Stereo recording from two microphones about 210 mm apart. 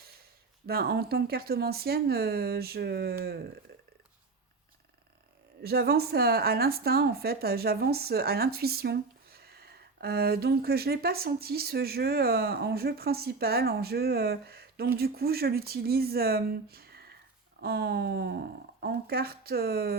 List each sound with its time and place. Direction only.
0.7 s speech: 50° right (ahead or behind)
3.7 s burping: 50° right (ahead or behind)
5.6 s speech: 50° right (ahead or behind)